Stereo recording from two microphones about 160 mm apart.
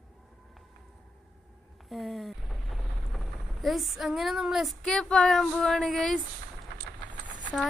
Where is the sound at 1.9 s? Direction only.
Centre (ahead or behind).